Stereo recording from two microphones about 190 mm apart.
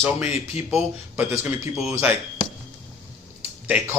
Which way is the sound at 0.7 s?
10° right (ahead or behind).